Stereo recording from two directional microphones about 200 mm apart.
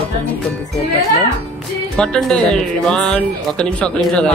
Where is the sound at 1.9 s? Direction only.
5° left (ahead or behind).